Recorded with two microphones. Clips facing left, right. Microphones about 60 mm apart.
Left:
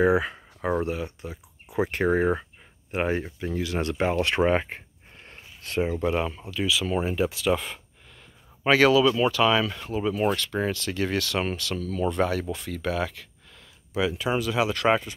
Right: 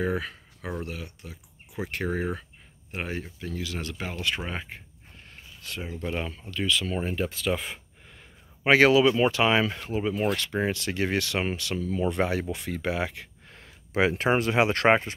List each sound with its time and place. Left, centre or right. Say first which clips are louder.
0.2 s speech: left 7 dB; left
4.0 s a sound: left 10 dB; left
6.0 s speech: left 6 dB; centre
8.6 s speech: even; centre
9.8 s speech: left 2 dB; centre
13.5 s speech: right 4 dB; right